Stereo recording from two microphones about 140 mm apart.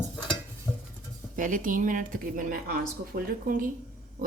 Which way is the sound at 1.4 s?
70° right (ahead or behind).